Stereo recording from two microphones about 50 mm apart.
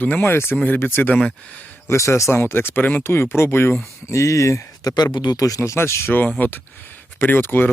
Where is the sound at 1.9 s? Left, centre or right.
Left.